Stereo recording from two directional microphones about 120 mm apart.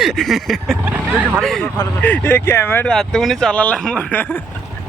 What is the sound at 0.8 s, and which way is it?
Speech, 15° right (ahead or behind).